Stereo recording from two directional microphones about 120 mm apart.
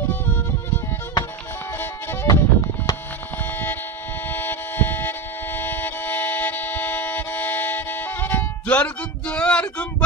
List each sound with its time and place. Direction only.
0.0 s music: 15° left (ahead or behind)
2.2 s music: 35° left (ahead or behind)
4.3 s music: 15° left (ahead or behind)